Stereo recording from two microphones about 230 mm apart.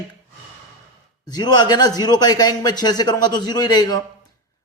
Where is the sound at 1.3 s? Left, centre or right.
Centre.